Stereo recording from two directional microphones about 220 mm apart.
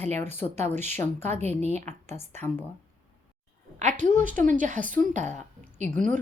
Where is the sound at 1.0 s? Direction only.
10° left (ahead or behind).